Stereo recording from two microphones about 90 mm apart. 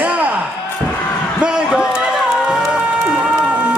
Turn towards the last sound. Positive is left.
turn(degrees=-10)  # may be behind; listen again after turning